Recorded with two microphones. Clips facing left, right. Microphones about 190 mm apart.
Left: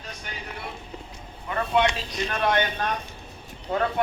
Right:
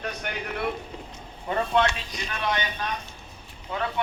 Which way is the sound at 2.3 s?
55° left (ahead or behind).